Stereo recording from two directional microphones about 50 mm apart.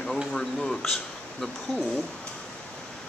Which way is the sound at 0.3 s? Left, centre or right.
Centre.